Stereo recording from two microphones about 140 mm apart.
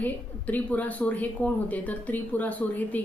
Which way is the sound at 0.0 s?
10° left (ahead or behind).